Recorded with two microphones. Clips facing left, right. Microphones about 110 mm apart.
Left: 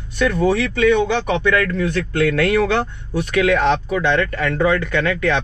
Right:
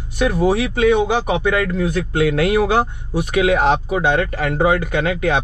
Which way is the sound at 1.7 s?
65° left (ahead or behind).